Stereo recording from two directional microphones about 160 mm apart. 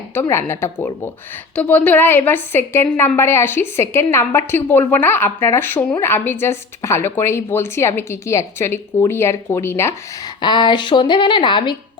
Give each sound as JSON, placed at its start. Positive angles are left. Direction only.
{"t": 0.1, "sound": "a woman's voice", "side_deg": 15}
{"t": 10.4, "sound": "speech", "side_deg": 30}